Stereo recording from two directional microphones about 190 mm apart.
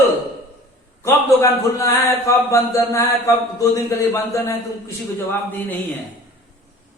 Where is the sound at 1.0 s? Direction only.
15° left (ahead or behind).